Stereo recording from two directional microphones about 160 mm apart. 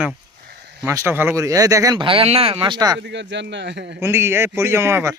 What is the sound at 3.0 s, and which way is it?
Speech, 90° right.